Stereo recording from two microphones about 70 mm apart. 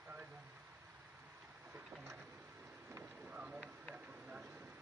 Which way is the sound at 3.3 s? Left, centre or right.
Centre.